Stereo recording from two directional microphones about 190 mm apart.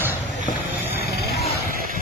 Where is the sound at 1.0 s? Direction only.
60° left (ahead or behind).